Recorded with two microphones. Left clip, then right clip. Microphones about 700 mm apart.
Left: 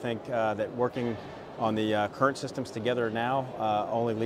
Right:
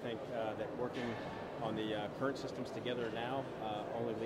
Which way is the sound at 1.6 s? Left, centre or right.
Left.